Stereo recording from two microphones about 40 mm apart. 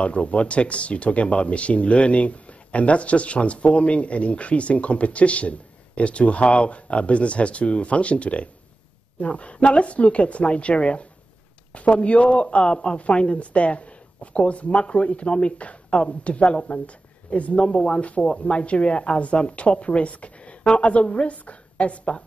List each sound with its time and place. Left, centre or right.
0.0 s speech: left